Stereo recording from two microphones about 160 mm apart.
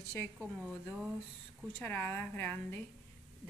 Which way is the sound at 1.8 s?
10° left (ahead or behind).